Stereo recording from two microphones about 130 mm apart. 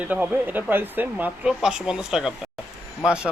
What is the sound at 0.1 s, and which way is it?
A man's voice, 10° right (ahead or behind).